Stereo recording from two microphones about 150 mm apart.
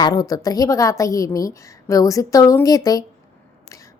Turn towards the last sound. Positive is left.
turn(degrees=25)  # may be behind; listen again after turning